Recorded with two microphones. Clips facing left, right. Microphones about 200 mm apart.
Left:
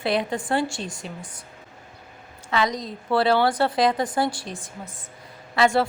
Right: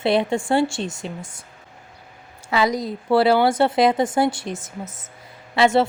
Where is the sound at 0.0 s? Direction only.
25° right (ahead or behind).